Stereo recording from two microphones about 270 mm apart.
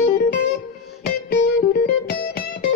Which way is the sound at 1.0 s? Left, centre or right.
Left.